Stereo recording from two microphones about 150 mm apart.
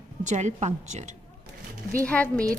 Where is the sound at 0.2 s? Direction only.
55° right (ahead or behind).